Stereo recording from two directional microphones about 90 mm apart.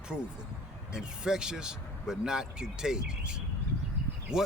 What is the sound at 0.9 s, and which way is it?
Speech, 10° right (ahead or behind).